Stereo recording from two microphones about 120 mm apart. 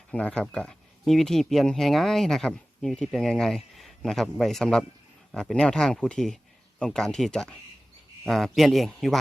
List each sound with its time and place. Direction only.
0.1 s speech: 10° left (ahead or behind)